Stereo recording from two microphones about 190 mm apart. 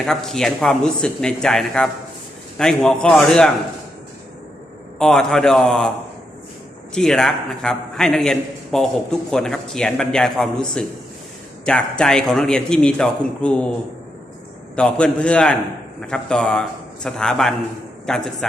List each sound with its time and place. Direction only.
0.0 s a man's voice: centre (ahead or behind)
4.9 s a man's voice: 5° left (ahead or behind)
6.9 s a man's voice: 5° left (ahead or behind)
14.8 s a man's voice: 5° left (ahead or behind)